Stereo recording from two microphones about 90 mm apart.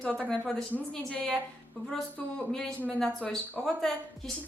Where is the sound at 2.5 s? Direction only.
5° left (ahead or behind).